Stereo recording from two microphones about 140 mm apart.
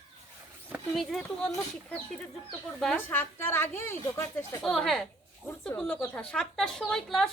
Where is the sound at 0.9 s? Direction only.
Centre (ahead or behind).